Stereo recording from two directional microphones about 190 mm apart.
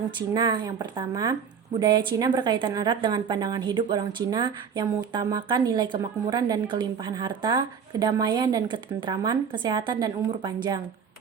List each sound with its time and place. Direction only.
0.2 s a woman's voice: 20° right (ahead or behind)